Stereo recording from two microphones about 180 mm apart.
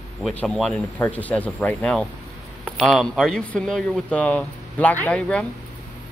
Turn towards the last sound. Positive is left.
turn(degrees=5)  # may be behind; listen again after turning